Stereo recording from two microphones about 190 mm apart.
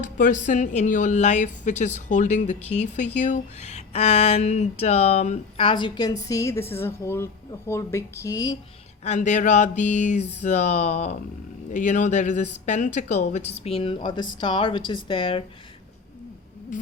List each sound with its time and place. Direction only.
0.0 s a woman's voice: 40° left (ahead or behind); by 8.5 s 20° left (ahead or behind)
9.0 s a woman's voice: 40° left (ahead or behind)
16.7 s a sound: 45° left (ahead or behind)